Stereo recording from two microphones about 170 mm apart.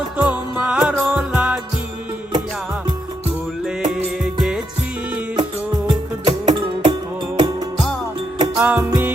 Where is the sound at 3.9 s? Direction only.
5° right (ahead or behind).